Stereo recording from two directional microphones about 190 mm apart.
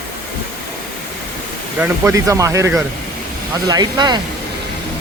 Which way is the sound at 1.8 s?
15° right (ahead or behind).